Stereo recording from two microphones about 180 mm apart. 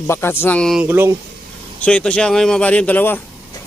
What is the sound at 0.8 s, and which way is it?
Speech, 10° right (ahead or behind).